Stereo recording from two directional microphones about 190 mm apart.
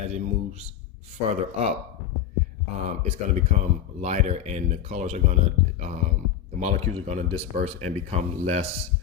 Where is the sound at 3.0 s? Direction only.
35° right (ahead or behind).